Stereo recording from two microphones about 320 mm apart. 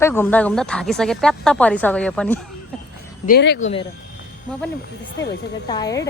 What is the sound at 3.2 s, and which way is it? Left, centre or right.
Speech, left.